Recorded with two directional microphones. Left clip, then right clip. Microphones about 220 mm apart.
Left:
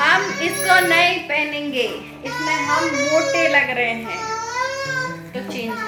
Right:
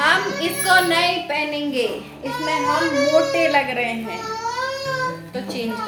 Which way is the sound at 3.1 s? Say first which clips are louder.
Left 2 dB; centre (ahead or behind).